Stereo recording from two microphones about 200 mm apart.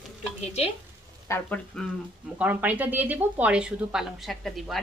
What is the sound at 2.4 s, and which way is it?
A woman's voice, 10° right (ahead or behind).